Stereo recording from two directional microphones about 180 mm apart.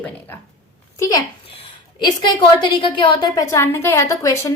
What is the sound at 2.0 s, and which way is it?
A woman's voice, 25° left (ahead or behind).